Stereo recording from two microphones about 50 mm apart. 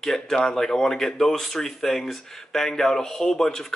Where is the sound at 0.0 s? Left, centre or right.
Centre.